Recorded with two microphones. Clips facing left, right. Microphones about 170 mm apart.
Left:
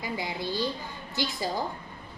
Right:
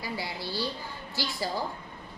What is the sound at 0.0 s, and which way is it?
A woman's voice, 20° left (ahead or behind).